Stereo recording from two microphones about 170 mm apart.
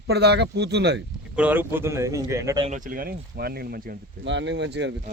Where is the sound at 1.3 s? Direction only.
10° right (ahead or behind).